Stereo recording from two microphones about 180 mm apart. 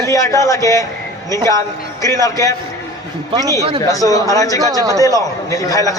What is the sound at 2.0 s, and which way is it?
Speech, 20° left (ahead or behind).